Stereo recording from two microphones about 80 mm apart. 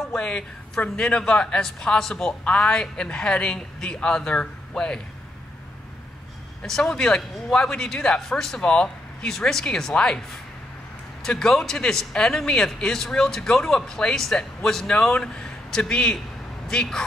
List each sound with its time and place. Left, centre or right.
0.0 s speech: centre
6.6 s speech: centre
11.2 s speech: centre